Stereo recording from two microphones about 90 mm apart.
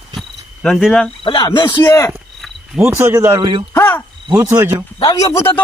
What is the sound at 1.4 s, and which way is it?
Speech, 55° left (ahead or behind).